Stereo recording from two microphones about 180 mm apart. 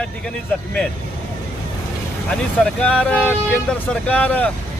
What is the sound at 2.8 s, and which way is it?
Speech, 5° left (ahead or behind).